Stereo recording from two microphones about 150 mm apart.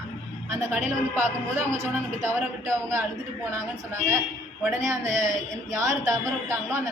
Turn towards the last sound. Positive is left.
turn(degrees=-20)  # may be behind; listen again after turning